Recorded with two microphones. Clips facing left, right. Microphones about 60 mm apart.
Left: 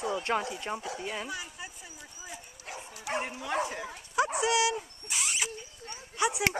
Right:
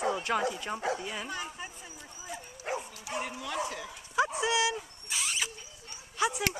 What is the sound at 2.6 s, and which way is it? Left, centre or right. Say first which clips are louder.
Bow-wow: right 10 dB; right.